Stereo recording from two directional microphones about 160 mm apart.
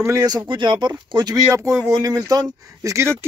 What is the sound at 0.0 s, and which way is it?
Speech, 20° right (ahead or behind).